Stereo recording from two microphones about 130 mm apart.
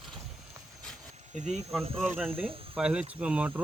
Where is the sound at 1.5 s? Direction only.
Centre (ahead or behind).